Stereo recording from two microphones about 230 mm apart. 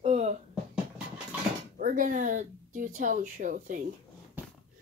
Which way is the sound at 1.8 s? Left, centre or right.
Right.